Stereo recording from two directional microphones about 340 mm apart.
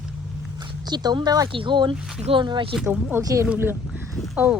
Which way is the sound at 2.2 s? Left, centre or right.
Centre.